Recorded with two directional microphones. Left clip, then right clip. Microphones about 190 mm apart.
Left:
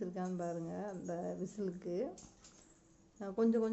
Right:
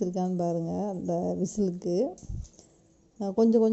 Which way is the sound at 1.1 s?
35° right (ahead or behind).